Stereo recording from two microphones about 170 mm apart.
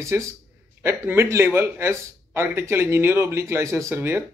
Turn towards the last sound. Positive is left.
turn(degrees=-15)  # may be behind; listen again after turning